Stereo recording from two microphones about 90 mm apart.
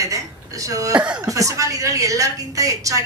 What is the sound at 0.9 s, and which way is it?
Speech, 10° right (ahead or behind).